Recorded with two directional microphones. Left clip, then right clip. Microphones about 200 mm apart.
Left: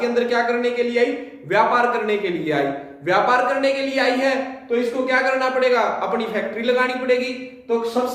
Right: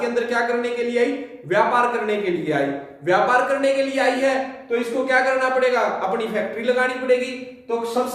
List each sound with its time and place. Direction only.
0.0 s a man's voice: 15° left (ahead or behind)